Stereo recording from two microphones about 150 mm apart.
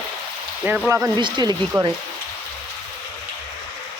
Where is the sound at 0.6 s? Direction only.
15° right (ahead or behind).